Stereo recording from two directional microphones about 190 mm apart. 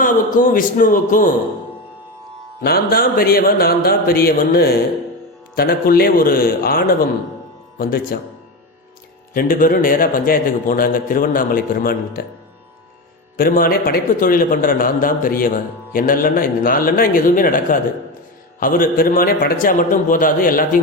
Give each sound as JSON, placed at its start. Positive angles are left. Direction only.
{"t": 0.0, "sound": "a man's voice", "side_deg": 45}
{"t": 2.6, "sound": "a man's voice", "side_deg": 55}
{"t": 9.3, "sound": "a man's voice", "side_deg": 50}
{"t": 13.3, "sound": "a man's voice", "side_deg": 50}